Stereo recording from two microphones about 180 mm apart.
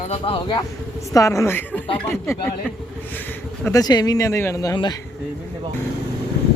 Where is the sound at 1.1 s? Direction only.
15° left (ahead or behind).